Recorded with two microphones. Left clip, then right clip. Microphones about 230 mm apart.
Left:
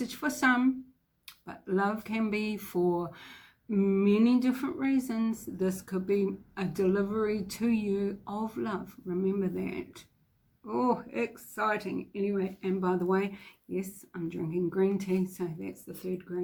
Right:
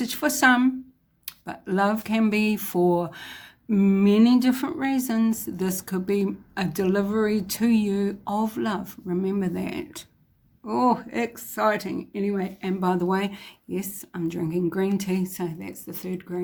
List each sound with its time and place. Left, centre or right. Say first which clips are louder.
0.0 s speech: right 8 dB; right